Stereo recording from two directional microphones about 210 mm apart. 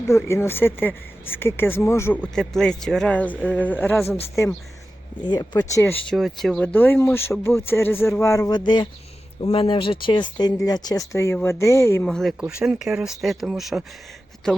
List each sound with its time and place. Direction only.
0.1 s speech: 10° left (ahead or behind)
12.0 s speech: centre (ahead or behind)